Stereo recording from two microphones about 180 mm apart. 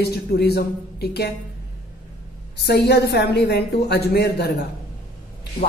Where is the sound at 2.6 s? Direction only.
65° left (ahead or behind).